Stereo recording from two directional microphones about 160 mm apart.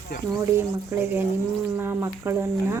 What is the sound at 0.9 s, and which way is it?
Speech, 15° right (ahead or behind).